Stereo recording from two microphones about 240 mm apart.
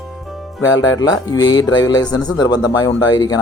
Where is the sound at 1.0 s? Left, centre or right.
Centre.